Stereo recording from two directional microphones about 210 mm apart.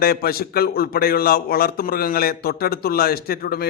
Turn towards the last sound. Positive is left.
turn(degrees=45)  # may be behind; listen again after turning